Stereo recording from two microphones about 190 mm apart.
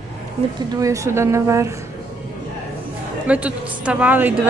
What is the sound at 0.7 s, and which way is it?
Speech, 15° right (ahead or behind).